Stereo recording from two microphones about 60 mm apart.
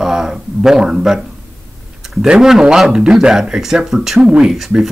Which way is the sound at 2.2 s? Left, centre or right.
Centre.